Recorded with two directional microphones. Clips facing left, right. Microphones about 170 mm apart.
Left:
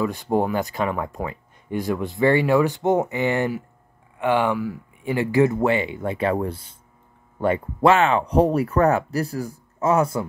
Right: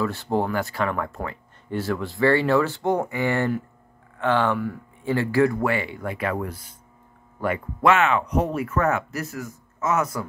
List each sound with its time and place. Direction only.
0.0 s speech: 15° left (ahead or behind)